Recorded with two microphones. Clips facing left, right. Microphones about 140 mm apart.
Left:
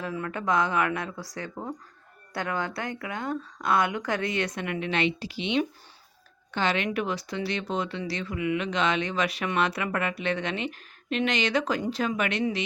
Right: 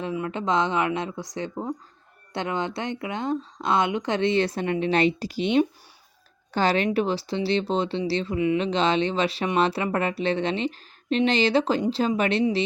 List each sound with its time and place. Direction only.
0.0 s speech: 20° right (ahead or behind)